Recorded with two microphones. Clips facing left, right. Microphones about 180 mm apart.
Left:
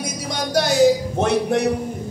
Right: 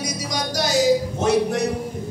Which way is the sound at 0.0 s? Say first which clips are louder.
Left 1 dB; 60° left (ahead or behind).